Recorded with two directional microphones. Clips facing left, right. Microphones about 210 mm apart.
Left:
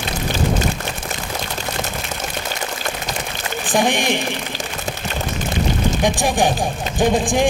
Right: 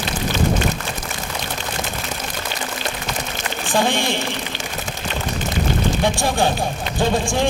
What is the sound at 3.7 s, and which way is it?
Speech, 15° left (ahead or behind).